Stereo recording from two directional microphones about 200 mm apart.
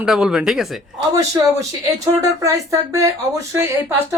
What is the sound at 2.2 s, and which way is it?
Speech, 15° right (ahead or behind).